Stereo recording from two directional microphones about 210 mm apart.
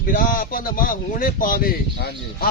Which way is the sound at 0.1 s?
40° left (ahead or behind).